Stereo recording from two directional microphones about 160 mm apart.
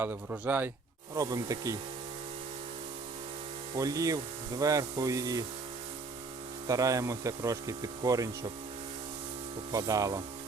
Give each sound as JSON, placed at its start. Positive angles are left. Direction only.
{"t": 0.0, "sound": "speech", "side_deg": -10}
{"t": 1.1, "sound": "speech", "side_deg": -20}
{"t": 3.8, "sound": "speech", "side_deg": -20}
{"t": 6.7, "sound": "speech", "side_deg": -20}
{"t": 9.7, "sound": "speech", "side_deg": -20}